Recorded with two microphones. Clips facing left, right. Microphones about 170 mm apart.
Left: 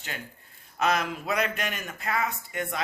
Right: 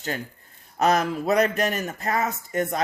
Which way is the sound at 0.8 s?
40° right (ahead or behind).